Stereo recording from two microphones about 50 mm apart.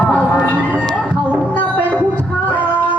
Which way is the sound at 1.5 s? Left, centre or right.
Left.